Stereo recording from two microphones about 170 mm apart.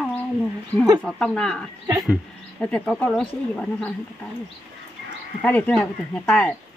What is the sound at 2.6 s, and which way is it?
Speech, centre (ahead or behind).